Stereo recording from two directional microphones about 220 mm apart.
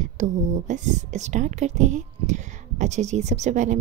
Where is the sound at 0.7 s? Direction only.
35° right (ahead or behind).